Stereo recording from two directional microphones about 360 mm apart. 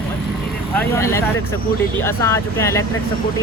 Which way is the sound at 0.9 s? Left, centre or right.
Centre.